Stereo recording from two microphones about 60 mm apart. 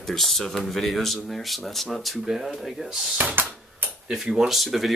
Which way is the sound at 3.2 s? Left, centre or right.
Right.